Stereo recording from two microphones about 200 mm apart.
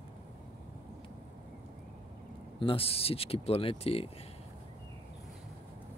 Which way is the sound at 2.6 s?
25° left (ahead or behind).